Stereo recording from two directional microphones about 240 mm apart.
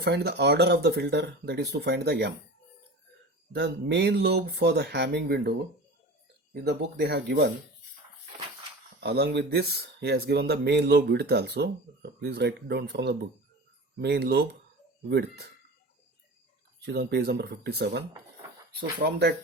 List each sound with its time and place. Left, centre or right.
0.0 s speech: right
3.5 s speech: right
9.0 s speech: right
16.8 s speech: right